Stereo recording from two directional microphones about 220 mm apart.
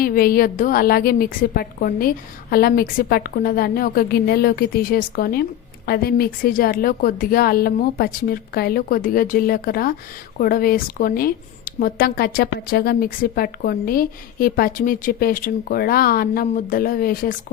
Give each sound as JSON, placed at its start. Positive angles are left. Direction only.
{"t": 0.0, "sound": "a woman's voice", "side_deg": 40}